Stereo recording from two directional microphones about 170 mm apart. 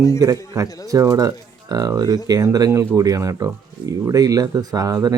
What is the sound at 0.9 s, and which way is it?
Speech, 20° right (ahead or behind).